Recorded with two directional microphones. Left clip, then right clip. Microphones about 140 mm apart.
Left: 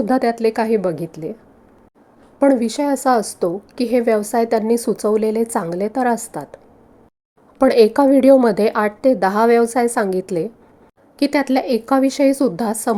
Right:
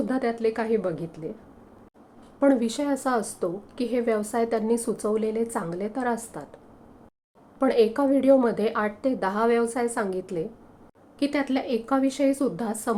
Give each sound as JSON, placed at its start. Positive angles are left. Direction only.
{"t": 0.1, "sound": "a woman's voice", "side_deg": 55}
{"t": 2.4, "sound": "a woman's voice", "side_deg": 35}
{"t": 7.6, "sound": "a woman's voice", "side_deg": 60}
{"t": 11.2, "sound": "a woman's voice", "side_deg": 50}